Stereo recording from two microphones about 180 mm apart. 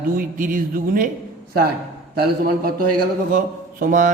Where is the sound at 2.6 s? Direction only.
55° right (ahead or behind).